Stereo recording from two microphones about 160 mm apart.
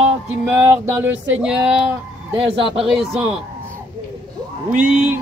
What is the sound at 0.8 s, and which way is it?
Speech, 15° right (ahead or behind).